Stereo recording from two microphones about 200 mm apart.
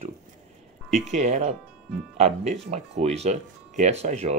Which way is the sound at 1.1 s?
35° right (ahead or behind).